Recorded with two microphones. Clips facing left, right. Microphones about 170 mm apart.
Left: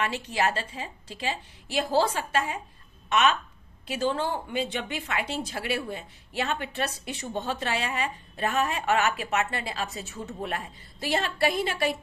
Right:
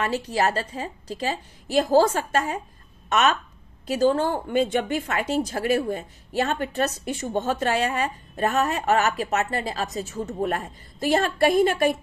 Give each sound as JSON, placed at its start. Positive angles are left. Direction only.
{"t": 0.0, "sound": "a woman's voice", "side_deg": -40}